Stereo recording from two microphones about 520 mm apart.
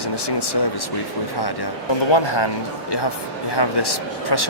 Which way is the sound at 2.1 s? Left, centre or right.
Left.